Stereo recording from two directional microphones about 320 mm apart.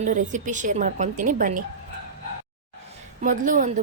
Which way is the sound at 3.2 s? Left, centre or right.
Right.